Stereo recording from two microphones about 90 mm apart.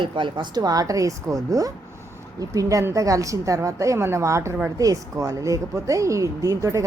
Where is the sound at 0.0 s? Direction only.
60° right (ahead or behind).